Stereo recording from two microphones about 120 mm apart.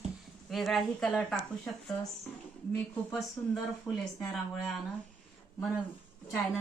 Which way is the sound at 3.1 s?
Centre (ahead or behind).